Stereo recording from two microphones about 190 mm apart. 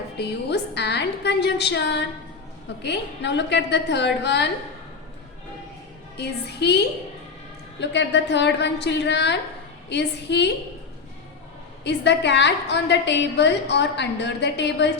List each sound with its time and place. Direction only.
0.2 s a woman's voice: 60° left (ahead or behind)
6.1 s a woman's voice: 60° left (ahead or behind)
11.8 s a woman's voice: 65° left (ahead or behind)